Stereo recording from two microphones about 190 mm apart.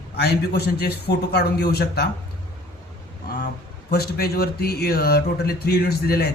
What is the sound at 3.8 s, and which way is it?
A man's voice, 55° left (ahead or behind).